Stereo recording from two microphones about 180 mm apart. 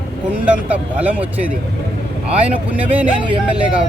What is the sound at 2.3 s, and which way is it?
Speech, 35° right (ahead or behind).